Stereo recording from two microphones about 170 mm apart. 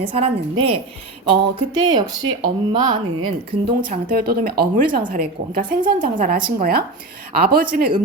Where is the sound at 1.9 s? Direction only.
25° right (ahead or behind).